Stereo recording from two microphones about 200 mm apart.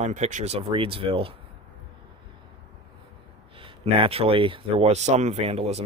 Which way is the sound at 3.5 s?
25° right (ahead or behind).